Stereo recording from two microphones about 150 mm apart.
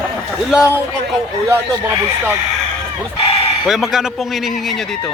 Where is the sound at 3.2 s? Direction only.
40° left (ahead or behind).